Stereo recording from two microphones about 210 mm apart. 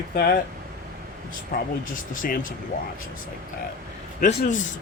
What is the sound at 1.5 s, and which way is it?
A man's voice, 40° left (ahead or behind).